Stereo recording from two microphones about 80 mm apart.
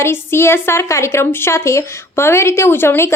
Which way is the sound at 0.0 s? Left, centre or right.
Left.